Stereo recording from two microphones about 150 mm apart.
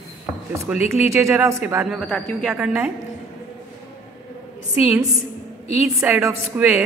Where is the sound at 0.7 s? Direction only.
10° right (ahead or behind).